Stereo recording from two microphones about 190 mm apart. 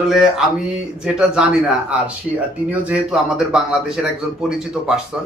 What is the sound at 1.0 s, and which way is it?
Speech, 5° right (ahead or behind).